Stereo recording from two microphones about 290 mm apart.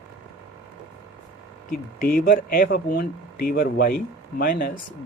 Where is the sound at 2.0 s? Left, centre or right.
Left.